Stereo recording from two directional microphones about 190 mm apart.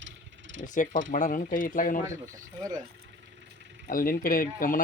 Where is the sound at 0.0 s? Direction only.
80° right.